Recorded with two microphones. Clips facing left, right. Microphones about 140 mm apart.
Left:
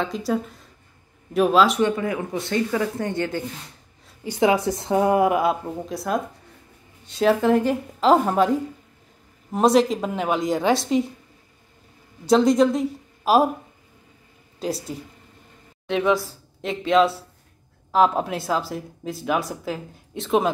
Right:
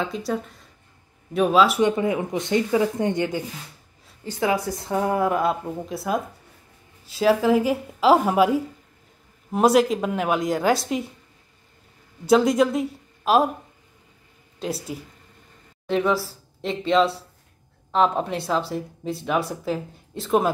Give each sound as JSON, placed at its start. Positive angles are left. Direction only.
{"t": 0.0, "sound": "speech", "side_deg": 0}
{"t": 1.8, "sound": "speech", "side_deg": -20}
{"t": 4.2, "sound": "speech", "side_deg": 15}
{"t": 5.4, "sound": "speech", "side_deg": 0}
{"t": 12.3, "sound": "speech", "side_deg": -5}
{"t": 14.6, "sound": "speech", "side_deg": 0}